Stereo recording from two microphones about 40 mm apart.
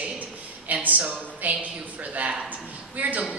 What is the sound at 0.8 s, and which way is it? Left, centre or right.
Speech, right.